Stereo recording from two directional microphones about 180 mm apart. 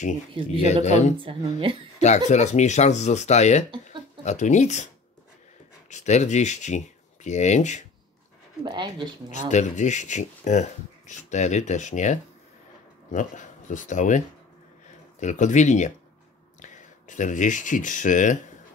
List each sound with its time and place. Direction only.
0.8 s speech: 40° left (ahead or behind)
1.2 s speech: 30° right (ahead or behind)
2.0 s speech: 40° left (ahead or behind)
5.9 s speech: 40° left (ahead or behind)
8.6 s speech: 25° right (ahead or behind)
9.3 s speech: 40° left (ahead or behind)